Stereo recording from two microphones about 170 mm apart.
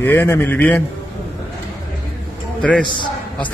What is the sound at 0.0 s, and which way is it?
Speech, 10° left (ahead or behind).